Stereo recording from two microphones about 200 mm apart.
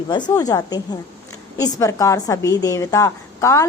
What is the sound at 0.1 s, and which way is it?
A woman's voice, 20° left (ahead or behind).